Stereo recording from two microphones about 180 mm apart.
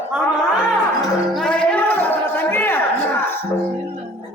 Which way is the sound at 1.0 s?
5° left (ahead or behind).